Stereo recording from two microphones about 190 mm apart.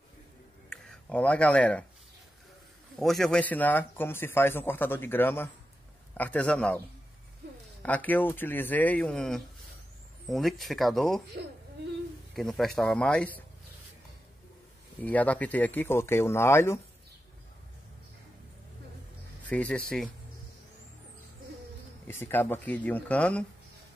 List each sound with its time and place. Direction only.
0.7 s speech: 5° left (ahead or behind)
3.0 s speech: centre (ahead or behind)
7.8 s speech: 10° left (ahead or behind)
12.4 s speech: centre (ahead or behind)
15.0 s speech: 10° left (ahead or behind)
19.4 s speech: 5° left (ahead or behind)
22.0 s speech: 10° left (ahead or behind)